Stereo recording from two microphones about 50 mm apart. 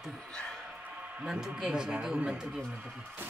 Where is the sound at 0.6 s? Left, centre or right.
Right.